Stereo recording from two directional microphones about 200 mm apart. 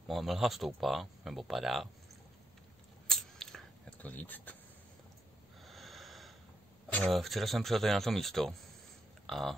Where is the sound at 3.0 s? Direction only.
Centre (ahead or behind).